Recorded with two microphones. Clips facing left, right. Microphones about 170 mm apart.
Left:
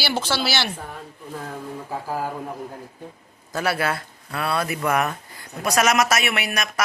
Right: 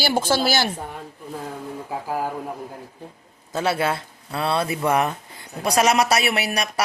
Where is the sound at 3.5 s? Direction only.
25° right (ahead or behind).